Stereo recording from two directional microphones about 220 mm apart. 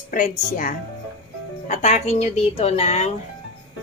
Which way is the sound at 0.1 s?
40° left (ahead or behind).